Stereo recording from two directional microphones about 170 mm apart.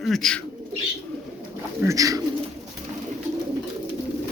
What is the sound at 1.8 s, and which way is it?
Speech, 20° right (ahead or behind).